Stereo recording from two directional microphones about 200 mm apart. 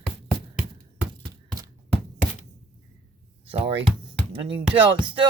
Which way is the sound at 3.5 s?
30° right (ahead or behind).